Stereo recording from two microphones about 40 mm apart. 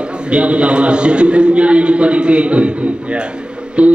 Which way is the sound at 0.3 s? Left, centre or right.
Right.